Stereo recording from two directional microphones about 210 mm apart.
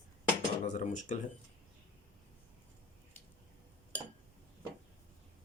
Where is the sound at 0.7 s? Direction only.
35° left (ahead or behind).